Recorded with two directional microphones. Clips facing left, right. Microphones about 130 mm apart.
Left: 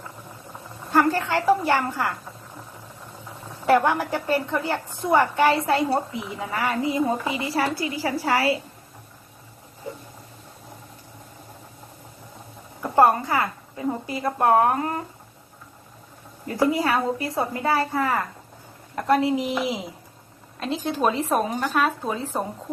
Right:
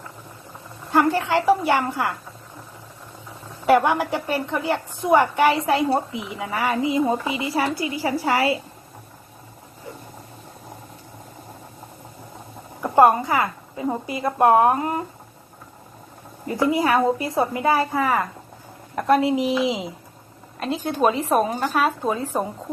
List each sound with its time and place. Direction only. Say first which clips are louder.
0.9 s a woman's voice: right 1 dB; 15° right (ahead or behind)
3.7 s a woman's voice: right 2 dB; 15° right (ahead or behind)
13.0 s a woman's voice: right 2 dB; 15° right (ahead or behind)
16.7 s a woman's voice: right 4 dB; 15° right (ahead or behind)
20.8 s speech: right 3 dB; centre (ahead or behind)
22.2 s a woman's voice: right 3 dB; 10° right (ahead or behind)